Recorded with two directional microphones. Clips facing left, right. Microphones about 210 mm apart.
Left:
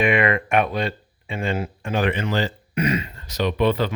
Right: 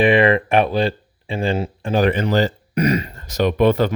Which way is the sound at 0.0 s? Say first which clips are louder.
Right 5 dB; 30° right (ahead or behind).